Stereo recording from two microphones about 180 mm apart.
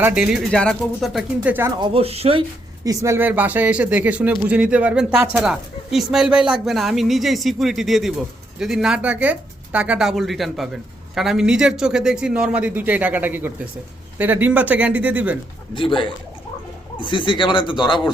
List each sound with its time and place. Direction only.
0.0 s speech: 5° right (ahead or behind)
1.8 s speech: 30° right (ahead or behind)
2.8 s speech: 20° right (ahead or behind)
15.7 s speech: 25° left (ahead or behind)